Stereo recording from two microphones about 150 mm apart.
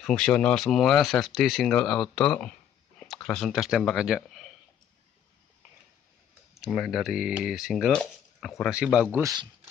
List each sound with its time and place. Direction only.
0.0 s speech: 5° left (ahead or behind)
6.6 s speech: centre (ahead or behind)
9.2 s speech: 25° right (ahead or behind)